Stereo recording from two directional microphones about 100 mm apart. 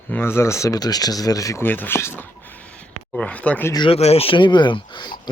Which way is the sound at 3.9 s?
90° left.